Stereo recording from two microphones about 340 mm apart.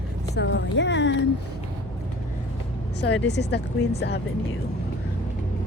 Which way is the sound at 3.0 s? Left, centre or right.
Left.